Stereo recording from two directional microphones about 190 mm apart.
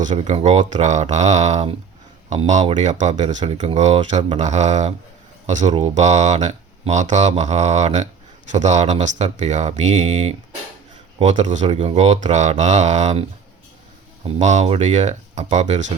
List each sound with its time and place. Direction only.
0.0 s speech: 40° right (ahead or behind)
14.3 s speech: 35° right (ahead or behind)